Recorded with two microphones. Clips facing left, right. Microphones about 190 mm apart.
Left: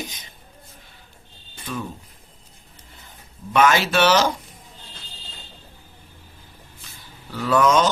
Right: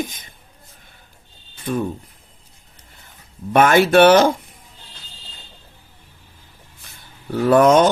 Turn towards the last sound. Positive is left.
turn(degrees=-55)  # may be behind; listen again after turning